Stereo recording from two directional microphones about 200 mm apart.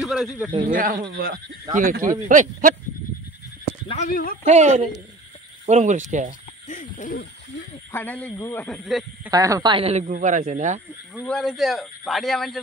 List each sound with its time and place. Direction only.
0.0 s speech: centre (ahead or behind)
0.7 s speech: 45° right (ahead or behind)
3.9 s speech: 40° left (ahead or behind)
4.5 s speech: 35° right (ahead or behind)
6.7 s hoot: 40° left (ahead or behind)
7.9 s speech: 10° left (ahead or behind)
9.3 s speech: 15° right (ahead or behind); by 10.8 s 35° right (ahead or behind)
11.1 s speech: 5° left (ahead or behind)